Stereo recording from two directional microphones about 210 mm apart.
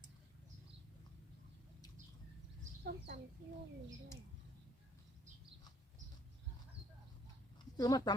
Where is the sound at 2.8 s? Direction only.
50° right (ahead or behind).